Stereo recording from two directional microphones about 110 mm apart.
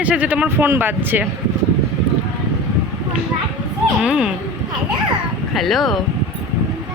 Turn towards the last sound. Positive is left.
turn(degrees=0)  # may be behind; listen again after turning